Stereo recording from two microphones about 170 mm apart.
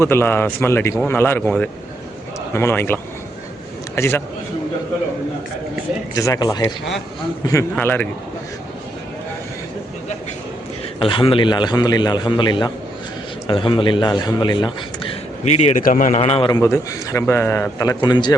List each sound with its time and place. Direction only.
0.0 s a man's voice: 15° left (ahead or behind)
6.1 s a man's voice: 20° left (ahead or behind)
11.0 s a man's voice: 30° left (ahead or behind)
15.8 s a man's voice: 50° left (ahead or behind)
16.5 s a man's voice: 15° left (ahead or behind)